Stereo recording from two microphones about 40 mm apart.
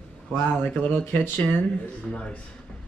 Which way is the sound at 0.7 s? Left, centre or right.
Left.